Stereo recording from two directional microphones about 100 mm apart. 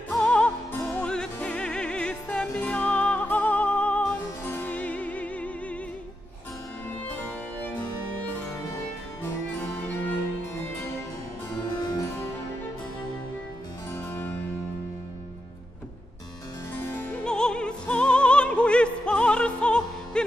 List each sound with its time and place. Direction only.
0.1 s music: 10° left (ahead or behind)
4.2 s music: 20° left (ahead or behind)
11.7 s music: 45° left (ahead or behind)
16.7 s harpsichord: 20° left (ahead or behind)
17.2 s music: 10° left (ahead or behind)